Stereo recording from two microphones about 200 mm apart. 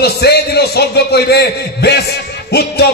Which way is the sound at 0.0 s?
55° left (ahead or behind).